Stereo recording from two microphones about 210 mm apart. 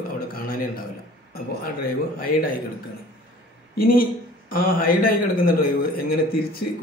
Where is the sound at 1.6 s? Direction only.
45° left (ahead or behind).